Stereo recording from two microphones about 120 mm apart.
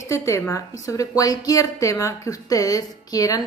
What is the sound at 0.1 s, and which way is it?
A woman's voice, 25° left (ahead or behind).